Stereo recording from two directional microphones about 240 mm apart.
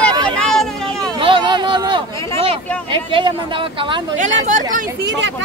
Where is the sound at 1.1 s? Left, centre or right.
Right.